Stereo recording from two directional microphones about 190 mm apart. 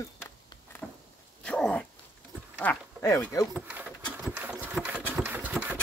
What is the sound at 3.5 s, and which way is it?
Speech, 5° right (ahead or behind).